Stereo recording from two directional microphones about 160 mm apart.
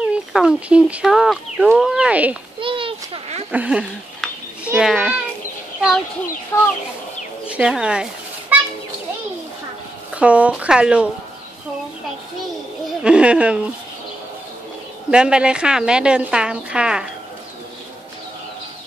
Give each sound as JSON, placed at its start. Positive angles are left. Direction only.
{"t": 0.1, "sound": "speech", "side_deg": -5}
{"t": 2.6, "sound": "a sound", "side_deg": -35}
{"t": 3.5, "sound": "a child's voice", "side_deg": -5}
{"t": 6.5, "sound": "speech", "side_deg": 15}
{"t": 7.4, "sound": "a sound", "side_deg": -5}
{"t": 10.1, "sound": "speech", "side_deg": -10}
{"t": 13.0, "sound": "speech", "side_deg": -5}
{"t": 15.0, "sound": "a woman's voice", "side_deg": -5}